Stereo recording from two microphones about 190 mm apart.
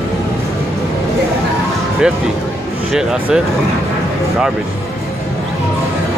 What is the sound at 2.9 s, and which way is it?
Speech, 5° right (ahead or behind).